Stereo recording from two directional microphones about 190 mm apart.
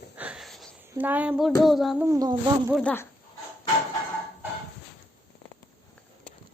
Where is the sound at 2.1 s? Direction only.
20° right (ahead or behind).